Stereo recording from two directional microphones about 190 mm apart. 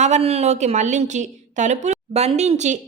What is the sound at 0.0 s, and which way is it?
A woman's voice, 35° right (ahead or behind).